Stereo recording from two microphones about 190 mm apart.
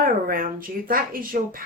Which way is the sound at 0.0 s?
50° right (ahead or behind).